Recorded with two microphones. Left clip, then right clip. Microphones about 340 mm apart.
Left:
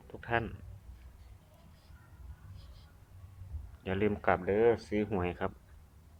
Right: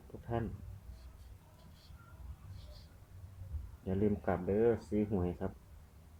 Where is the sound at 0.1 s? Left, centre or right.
Left.